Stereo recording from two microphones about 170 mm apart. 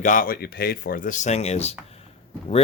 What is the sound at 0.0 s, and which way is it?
Speech, 50° left (ahead or behind).